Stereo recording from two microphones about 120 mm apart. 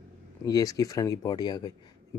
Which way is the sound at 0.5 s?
30° left (ahead or behind).